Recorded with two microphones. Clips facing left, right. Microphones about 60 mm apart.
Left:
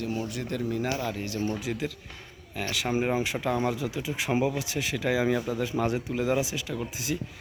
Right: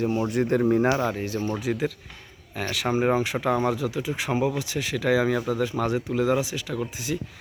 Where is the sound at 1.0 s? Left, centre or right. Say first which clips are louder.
Right 4 dB; centre.